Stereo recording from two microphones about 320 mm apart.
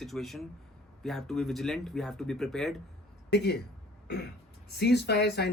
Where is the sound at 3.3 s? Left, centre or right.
Left.